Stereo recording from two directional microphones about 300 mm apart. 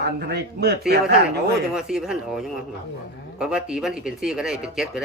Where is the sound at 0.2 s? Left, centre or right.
Right.